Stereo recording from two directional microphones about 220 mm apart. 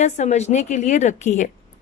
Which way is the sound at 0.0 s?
30° left (ahead or behind).